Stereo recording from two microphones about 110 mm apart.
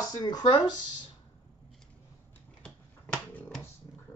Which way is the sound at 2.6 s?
10° left (ahead or behind).